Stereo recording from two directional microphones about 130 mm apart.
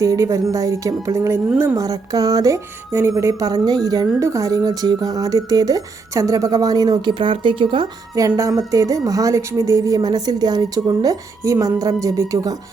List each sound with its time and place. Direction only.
0.0 s a woman's voice: 25° right (ahead or behind); by 7.9 s 40° right (ahead or behind)
8.4 s a woman's voice: 25° right (ahead or behind)